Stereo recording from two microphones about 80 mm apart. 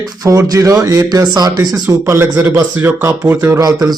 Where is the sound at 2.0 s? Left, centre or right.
Right.